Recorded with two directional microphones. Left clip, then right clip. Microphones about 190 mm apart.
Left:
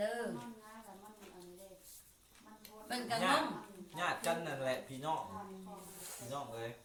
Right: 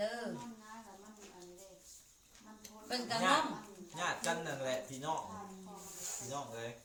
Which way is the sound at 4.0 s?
Centre (ahead or behind).